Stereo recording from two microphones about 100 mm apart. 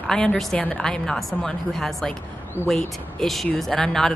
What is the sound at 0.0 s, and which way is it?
A woman's voice, 5° left (ahead or behind).